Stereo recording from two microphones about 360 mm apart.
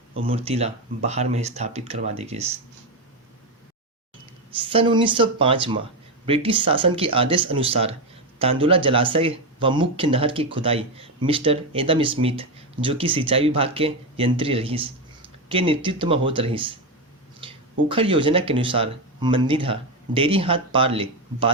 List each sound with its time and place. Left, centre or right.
0.3 s speech: centre
4.5 s speech: centre